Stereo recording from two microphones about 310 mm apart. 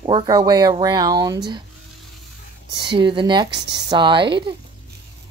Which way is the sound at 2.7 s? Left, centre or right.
Centre.